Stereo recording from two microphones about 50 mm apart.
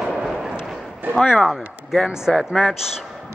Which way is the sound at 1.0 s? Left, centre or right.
Right.